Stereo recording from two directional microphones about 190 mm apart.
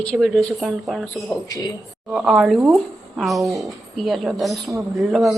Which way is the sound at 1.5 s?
20° left (ahead or behind).